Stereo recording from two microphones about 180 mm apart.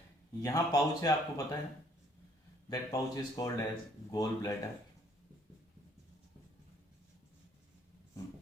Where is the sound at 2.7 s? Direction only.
20° left (ahead or behind).